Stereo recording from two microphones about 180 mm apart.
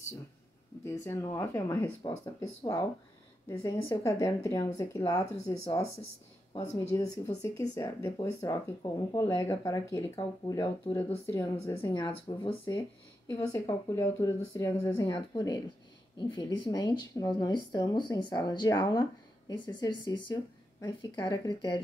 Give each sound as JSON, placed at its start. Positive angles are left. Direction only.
{"t": 0.8, "sound": "speech", "side_deg": 15}
{"t": 2.0, "sound": "speech", "side_deg": 25}
{"t": 5.3, "sound": "speech", "side_deg": 35}
{"t": 7.5, "sound": "speech", "side_deg": 15}